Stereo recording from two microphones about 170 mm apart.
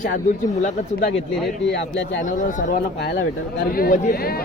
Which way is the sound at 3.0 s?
70° left (ahead or behind).